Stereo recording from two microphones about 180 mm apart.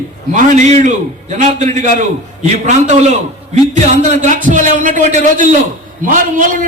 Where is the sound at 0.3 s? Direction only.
40° right (ahead or behind).